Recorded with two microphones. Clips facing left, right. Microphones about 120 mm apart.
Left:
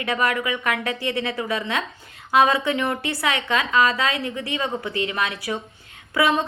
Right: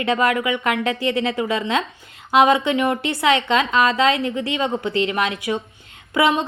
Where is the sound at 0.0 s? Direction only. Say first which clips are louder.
Right 4 dB; 25° right (ahead or behind).